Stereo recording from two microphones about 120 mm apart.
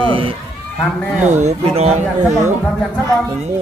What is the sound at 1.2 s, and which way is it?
Speech, 85° right.